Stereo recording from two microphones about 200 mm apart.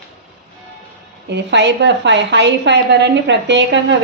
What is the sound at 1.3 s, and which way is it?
A woman's voice, 60° right (ahead or behind).